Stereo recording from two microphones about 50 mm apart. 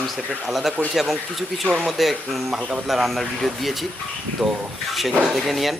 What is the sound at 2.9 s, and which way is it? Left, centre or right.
Speech, centre.